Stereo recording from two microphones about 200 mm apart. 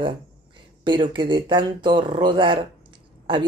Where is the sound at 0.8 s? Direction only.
25° right (ahead or behind).